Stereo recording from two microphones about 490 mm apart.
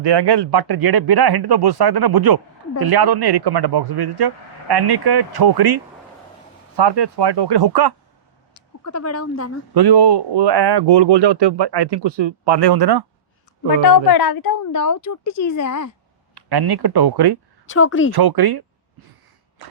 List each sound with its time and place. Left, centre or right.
0.0 s speech: right
6.7 s speech: right
8.5 s speech: left
9.7 s speech: right
13.8 s a woman's voice: left
16.3 s speech: right
17.7 s speech: left
18.1 s speech: right